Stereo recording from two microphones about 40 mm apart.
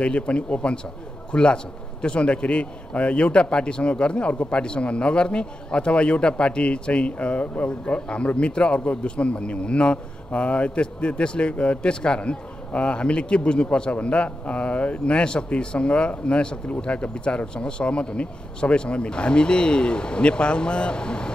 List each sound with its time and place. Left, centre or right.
0.0 s a man's voice: left